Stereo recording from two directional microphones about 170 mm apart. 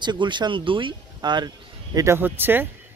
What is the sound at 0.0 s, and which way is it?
Speech, 25° right (ahead or behind).